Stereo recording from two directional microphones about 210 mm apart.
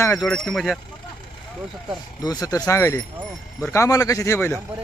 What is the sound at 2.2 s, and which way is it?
A man's voice, 15° left (ahead or behind).